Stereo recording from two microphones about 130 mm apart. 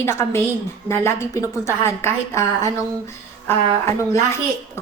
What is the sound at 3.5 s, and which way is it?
Speech, 20° left (ahead or behind).